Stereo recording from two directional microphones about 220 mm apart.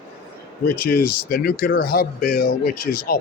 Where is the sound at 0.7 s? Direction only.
45° left (ahead or behind).